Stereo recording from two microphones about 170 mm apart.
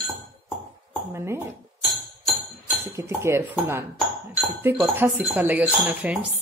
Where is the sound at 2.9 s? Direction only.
15° right (ahead or behind).